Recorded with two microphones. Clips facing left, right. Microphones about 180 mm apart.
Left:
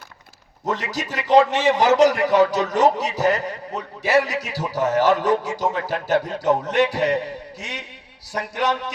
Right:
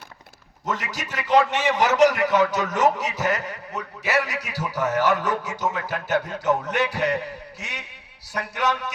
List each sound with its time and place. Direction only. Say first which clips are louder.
0.6 s a man's voice: left 4 dB; 35° left (ahead or behind)